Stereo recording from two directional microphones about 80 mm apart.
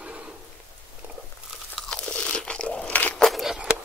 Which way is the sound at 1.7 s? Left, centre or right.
Centre.